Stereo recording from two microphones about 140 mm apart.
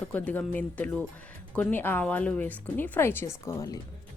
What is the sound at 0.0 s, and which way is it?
A woman's voice, 10° left (ahead or behind).